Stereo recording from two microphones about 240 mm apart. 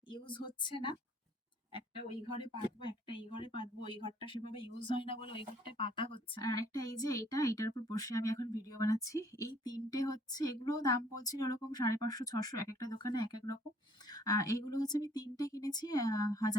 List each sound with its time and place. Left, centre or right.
0.1 s a woman's voice: centre
2.4 s speech: centre